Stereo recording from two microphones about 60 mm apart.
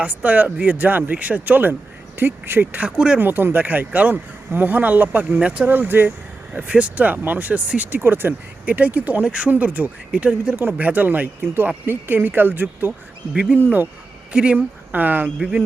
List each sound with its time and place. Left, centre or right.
0.0 s speech: right
5.6 s speech: right
6.5 s speech: centre
10.5 s speech: right
13.3 s speech: centre
14.9 s speech: right
15.4 s speech: centre